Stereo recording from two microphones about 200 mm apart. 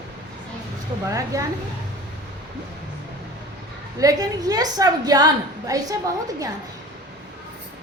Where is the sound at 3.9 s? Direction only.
20° right (ahead or behind).